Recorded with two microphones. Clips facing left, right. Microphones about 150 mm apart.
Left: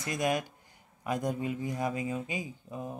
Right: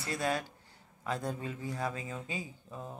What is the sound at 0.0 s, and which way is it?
Speech, 15° left (ahead or behind).